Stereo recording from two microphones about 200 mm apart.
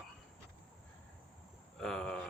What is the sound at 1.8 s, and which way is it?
Speech, 5° left (ahead or behind).